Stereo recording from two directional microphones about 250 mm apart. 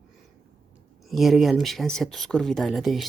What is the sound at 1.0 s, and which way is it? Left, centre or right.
Speech, centre.